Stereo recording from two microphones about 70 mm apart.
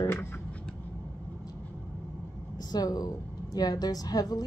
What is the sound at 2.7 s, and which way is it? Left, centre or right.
A woman's voice, left.